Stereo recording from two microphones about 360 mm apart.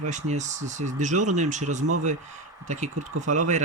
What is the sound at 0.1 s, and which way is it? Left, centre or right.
Speech, centre.